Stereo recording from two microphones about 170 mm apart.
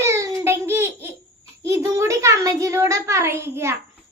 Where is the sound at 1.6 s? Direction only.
20° right (ahead or behind).